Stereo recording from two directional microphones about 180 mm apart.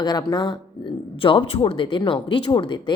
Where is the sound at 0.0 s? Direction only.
20° left (ahead or behind).